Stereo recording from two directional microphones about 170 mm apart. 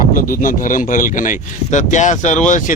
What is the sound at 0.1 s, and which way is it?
A man's voice, 55° left (ahead or behind).